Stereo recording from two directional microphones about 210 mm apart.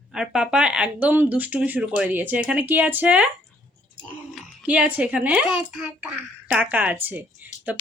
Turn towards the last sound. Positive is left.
turn(degrees=-5)  # may be behind; listen again after turning